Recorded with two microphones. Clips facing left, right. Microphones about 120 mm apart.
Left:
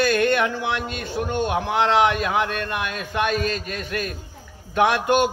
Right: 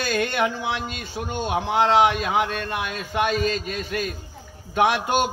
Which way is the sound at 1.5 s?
15° right (ahead or behind).